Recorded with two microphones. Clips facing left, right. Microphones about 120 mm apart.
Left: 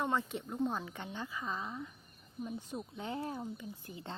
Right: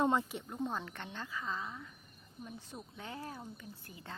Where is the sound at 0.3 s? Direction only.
Centre (ahead or behind).